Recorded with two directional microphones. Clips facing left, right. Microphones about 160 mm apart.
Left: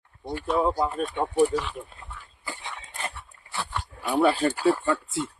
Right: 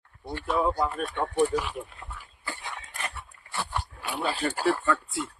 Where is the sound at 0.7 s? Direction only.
20° left (ahead or behind).